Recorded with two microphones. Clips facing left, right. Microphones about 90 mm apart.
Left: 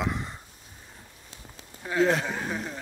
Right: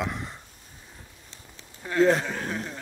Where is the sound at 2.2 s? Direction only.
5° left (ahead or behind).